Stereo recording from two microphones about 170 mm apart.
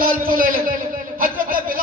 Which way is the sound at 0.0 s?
55° right (ahead or behind).